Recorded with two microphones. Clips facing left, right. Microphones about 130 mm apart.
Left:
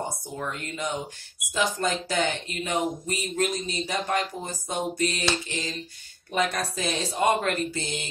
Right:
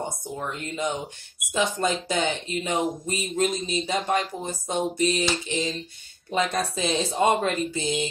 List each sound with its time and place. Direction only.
0.4 s speech: 20° right (ahead or behind)